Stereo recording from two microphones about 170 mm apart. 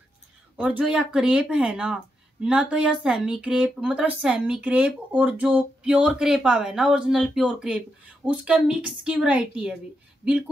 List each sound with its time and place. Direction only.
0.6 s speech: 5° right (ahead or behind)